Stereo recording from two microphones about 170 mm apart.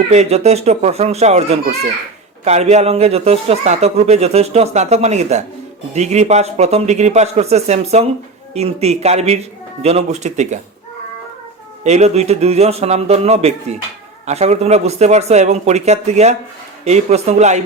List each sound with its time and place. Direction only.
0.1 s speech: 40° right (ahead or behind)
11.8 s speech: 40° right (ahead or behind)